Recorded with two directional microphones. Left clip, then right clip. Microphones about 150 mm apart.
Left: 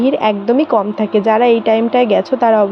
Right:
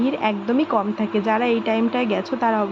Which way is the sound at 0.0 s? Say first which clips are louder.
Left 8 dB; 35° left (ahead or behind).